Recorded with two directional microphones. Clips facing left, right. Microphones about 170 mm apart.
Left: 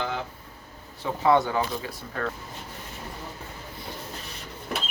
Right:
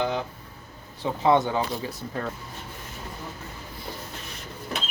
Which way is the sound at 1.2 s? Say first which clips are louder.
Even; 20° right (ahead or behind).